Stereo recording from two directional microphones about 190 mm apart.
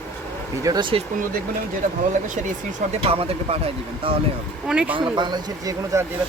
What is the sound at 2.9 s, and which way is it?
Speech, 30° right (ahead or behind).